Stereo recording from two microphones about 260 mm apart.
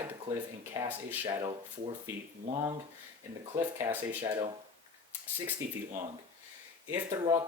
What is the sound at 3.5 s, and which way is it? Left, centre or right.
Speech, centre.